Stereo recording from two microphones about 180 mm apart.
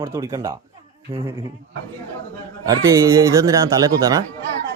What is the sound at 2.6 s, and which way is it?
A man's voice, 15° right (ahead or behind).